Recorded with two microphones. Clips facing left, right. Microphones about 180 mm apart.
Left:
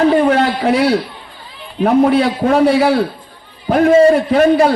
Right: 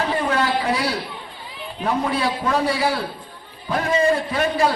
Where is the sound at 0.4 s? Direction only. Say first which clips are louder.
Left 7 dB; 60° left (ahead or behind).